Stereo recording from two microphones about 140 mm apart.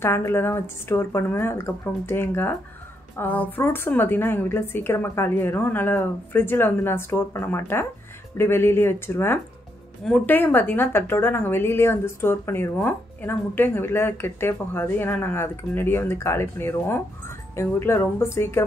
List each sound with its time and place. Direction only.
0.0 s a woman's voice: 15° left (ahead or behind)